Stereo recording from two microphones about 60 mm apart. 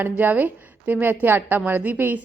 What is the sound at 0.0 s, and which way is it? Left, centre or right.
A woman's voice, right.